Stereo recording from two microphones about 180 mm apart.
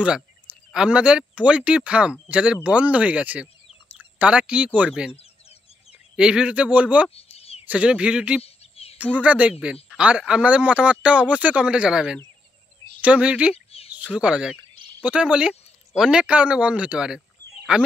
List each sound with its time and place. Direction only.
0.7 s speech: 5° right (ahead or behind)
6.1 s speech: 5° right (ahead or behind)
7.2 s a sound: 35° left (ahead or behind)
7.6 s speech: 5° right (ahead or behind)
8.4 s a sound: 35° left (ahead or behind)
9.2 s speech: 5° right (ahead or behind)